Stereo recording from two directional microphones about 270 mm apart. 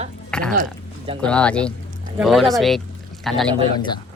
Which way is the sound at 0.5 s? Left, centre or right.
Right.